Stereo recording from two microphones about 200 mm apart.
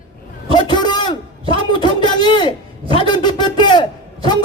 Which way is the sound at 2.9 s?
25° left (ahead or behind).